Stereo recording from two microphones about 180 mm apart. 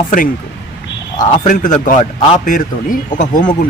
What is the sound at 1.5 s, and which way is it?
Speech, 45° left (ahead or behind).